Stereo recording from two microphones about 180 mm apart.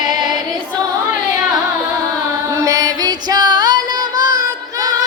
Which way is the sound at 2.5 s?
20° right (ahead or behind).